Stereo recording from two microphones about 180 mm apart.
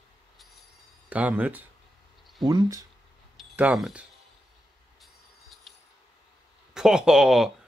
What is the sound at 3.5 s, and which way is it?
Speech, 5° right (ahead or behind).